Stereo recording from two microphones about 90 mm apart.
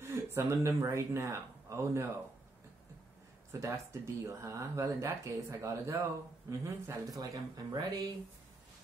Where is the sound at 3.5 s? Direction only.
35° right (ahead or behind).